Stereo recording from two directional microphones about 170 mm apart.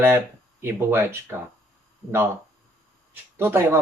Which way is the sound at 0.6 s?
15° right (ahead or behind).